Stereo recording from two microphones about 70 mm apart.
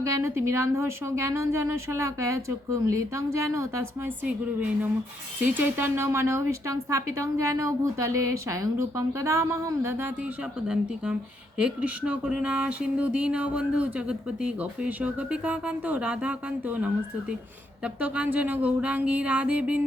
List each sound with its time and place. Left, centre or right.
0.0 s a woman's voice: right
5.5 s a woman's voice: right
10.2 s speech: centre
17.8 s a sound: centre